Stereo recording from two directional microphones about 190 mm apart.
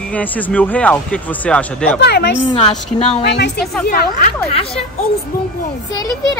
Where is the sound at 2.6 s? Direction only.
35° left (ahead or behind).